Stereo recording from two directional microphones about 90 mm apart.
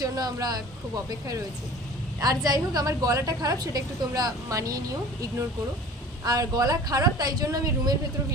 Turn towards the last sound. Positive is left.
turn(degrees=-45)  # may be behind; listen again after turning